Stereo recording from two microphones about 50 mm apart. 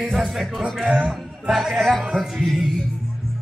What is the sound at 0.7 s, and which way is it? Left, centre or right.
Speech, right.